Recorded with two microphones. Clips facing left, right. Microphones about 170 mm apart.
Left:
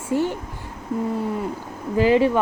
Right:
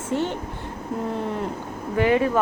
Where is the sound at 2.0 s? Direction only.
30° left (ahead or behind).